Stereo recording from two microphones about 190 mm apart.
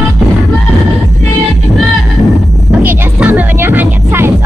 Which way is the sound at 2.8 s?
10° right (ahead or behind).